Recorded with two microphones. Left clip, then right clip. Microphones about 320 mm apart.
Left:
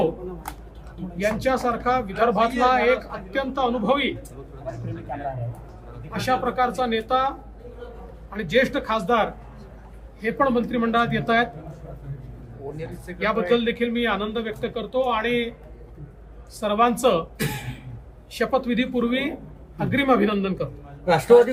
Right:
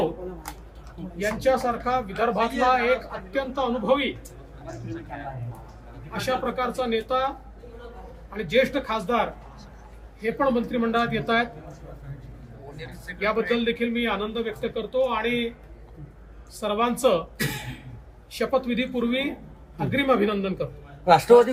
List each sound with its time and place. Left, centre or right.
1.2 s a man's voice: centre
6.1 s a man's voice: centre
12.7 s a man's voice: centre
16.6 s a man's voice: centre
18.3 s a man's voice: centre
21.2 s speech: centre